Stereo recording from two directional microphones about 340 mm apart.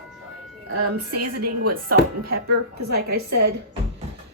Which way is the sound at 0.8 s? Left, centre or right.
Right.